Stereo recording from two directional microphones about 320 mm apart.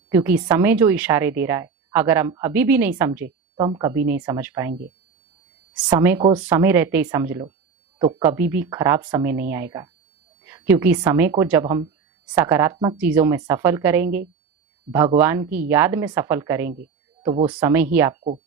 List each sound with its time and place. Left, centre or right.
0.1 s speech: centre
5.7 s speech: centre